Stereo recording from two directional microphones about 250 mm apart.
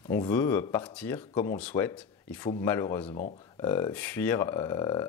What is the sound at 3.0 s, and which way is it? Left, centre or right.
Speech, left.